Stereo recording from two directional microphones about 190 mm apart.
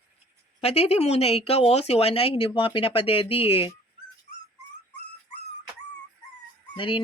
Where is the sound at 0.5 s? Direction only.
30° left (ahead or behind).